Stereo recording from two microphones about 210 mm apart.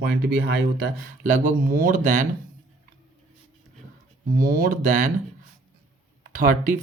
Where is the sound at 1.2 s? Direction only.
40° right (ahead or behind).